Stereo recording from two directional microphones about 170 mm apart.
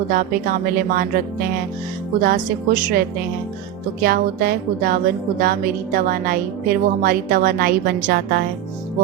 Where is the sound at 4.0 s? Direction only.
60° right (ahead or behind).